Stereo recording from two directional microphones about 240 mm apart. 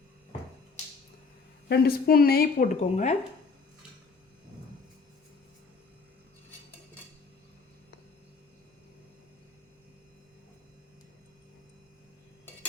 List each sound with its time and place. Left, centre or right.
1.6 s speech: left